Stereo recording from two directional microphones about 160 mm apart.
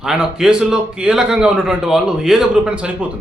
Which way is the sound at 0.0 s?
5° right (ahead or behind).